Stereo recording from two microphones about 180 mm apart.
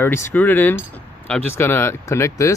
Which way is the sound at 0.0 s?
10° left (ahead or behind).